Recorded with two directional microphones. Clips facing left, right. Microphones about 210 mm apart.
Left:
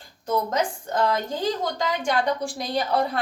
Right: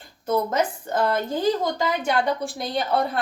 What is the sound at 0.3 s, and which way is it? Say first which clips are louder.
A woman's voice: right 2 dB; 5° right (ahead or behind).